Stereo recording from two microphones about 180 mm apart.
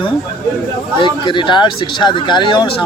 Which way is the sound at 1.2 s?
25° left (ahead or behind).